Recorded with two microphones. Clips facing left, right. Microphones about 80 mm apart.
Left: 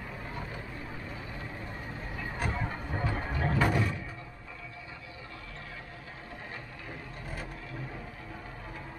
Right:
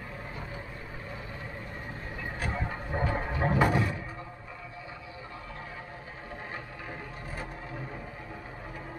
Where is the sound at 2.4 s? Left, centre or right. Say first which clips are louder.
Even; centre.